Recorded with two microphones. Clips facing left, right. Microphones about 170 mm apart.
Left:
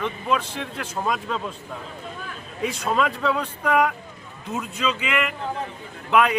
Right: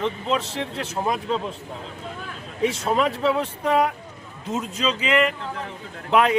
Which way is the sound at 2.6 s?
25° right (ahead or behind).